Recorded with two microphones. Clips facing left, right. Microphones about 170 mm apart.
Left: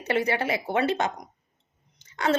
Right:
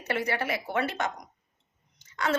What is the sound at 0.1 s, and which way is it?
A woman's voice, 25° left (ahead or behind).